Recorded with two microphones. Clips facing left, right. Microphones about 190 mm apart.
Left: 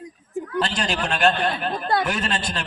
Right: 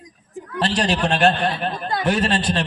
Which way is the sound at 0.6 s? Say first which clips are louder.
Right 5 dB; 35° right (ahead or behind).